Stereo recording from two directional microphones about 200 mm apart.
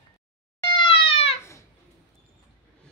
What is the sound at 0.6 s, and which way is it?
Cat, 25° left (ahead or behind).